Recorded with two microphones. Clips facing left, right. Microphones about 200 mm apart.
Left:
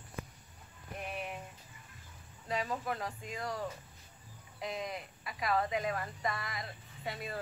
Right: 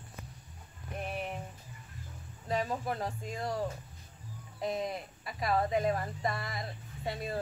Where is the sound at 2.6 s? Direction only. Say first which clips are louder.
Right 2 dB; 30° right (ahead or behind).